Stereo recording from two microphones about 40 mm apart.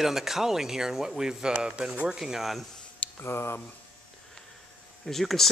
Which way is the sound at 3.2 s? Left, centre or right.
Left.